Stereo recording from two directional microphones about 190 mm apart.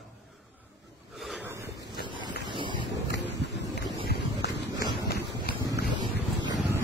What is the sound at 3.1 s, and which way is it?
Wild animals, 65° left (ahead or behind).